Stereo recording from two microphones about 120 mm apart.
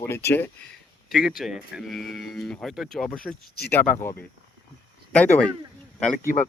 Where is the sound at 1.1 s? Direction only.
Centre (ahead or behind); by 4.1 s 15° left (ahead or behind).